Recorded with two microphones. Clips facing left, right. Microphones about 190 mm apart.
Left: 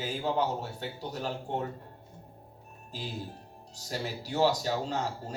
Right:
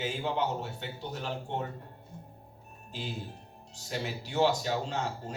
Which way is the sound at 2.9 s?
40° left (ahead or behind).